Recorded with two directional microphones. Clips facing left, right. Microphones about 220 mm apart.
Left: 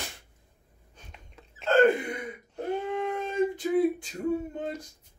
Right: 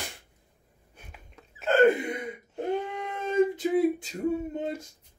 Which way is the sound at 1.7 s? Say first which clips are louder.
Right 1 dB; 20° right (ahead or behind).